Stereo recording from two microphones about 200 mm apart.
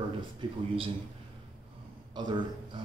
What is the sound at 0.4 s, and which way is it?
Speech, 25° right (ahead or behind).